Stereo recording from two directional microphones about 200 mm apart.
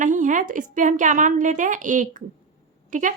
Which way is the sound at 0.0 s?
40° right (ahead or behind).